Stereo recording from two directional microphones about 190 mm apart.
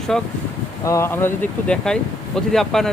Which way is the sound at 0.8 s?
15° left (ahead or behind).